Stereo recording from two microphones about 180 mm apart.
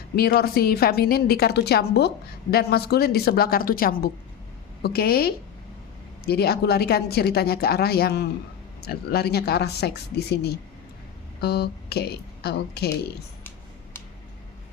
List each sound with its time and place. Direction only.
0.2 s a woman's voice: 55° left (ahead or behind)